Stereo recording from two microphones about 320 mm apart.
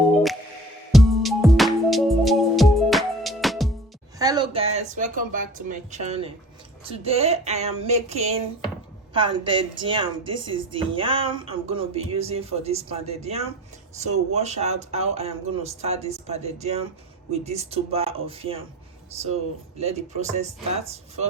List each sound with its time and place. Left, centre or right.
0.9 s music: centre
4.2 s speech: centre
19.8 s speech: right